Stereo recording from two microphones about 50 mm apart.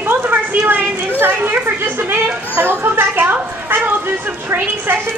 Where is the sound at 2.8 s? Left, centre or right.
Right.